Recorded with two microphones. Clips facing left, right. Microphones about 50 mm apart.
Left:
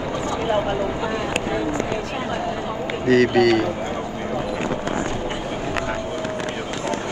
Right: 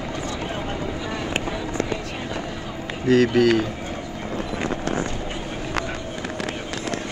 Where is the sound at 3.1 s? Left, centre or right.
Centre.